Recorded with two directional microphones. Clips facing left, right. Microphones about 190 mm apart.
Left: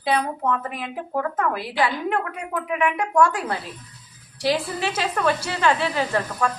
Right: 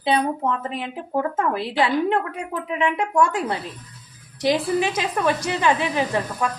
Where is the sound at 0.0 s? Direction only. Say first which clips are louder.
Right 2 dB; 25° right (ahead or behind).